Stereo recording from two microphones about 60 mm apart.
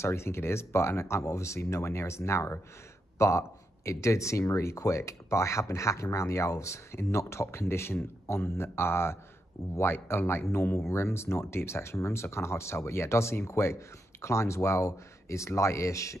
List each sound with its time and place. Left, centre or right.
0.0 s speech: left